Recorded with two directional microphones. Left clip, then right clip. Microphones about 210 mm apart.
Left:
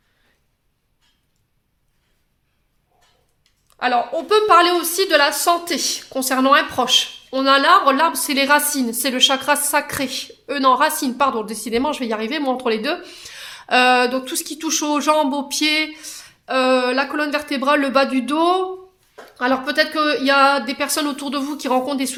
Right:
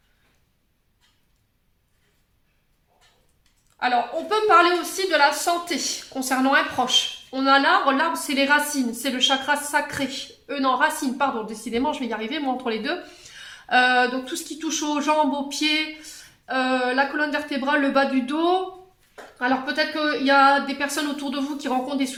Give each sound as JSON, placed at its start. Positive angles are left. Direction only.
{"t": 3.8, "sound": "a woman's voice", "side_deg": 50}